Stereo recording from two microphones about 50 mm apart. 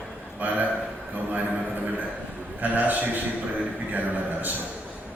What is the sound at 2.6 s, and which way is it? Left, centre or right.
A man's voice, right.